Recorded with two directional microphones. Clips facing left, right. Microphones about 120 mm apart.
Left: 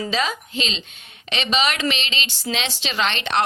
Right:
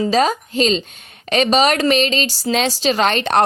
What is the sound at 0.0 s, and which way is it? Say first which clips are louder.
A woman's voice: right 8 dB; 40° right (ahead or behind).